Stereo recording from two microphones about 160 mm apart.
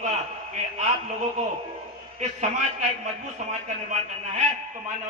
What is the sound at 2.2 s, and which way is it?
A man's voice, 50° right (ahead or behind).